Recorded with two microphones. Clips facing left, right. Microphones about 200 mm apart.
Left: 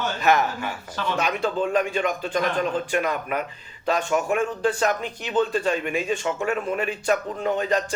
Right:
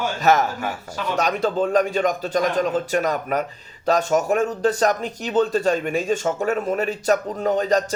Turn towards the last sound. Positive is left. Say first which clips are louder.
# right 4 dB
turn(degrees=-40)  # may be behind; listen again after turning